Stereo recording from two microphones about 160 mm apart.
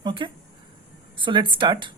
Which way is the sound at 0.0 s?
30° right (ahead or behind).